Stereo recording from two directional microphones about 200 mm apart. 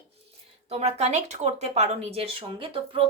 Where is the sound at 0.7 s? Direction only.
30° right (ahead or behind).